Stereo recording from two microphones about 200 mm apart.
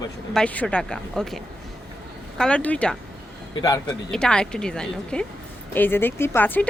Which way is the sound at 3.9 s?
5° left (ahead or behind).